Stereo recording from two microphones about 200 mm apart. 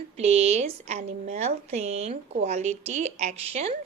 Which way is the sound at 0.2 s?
30° right (ahead or behind).